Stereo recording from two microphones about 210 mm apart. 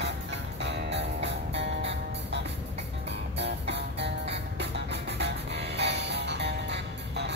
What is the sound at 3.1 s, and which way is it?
Music, 55° right (ahead or behind).